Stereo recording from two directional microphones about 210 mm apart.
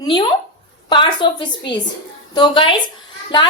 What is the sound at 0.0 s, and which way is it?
A woman's voice, 20° left (ahead or behind).